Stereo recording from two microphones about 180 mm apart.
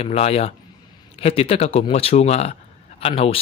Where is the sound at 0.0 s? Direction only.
35° left (ahead or behind).